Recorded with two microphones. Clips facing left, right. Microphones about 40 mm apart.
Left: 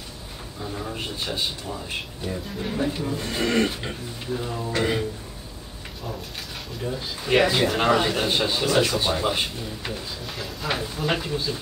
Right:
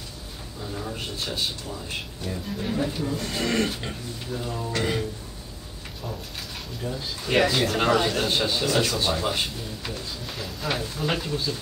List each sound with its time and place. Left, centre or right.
0.6 s a man's voice: centre
6.8 s a man's voice: centre
10.2 s a man's voice: centre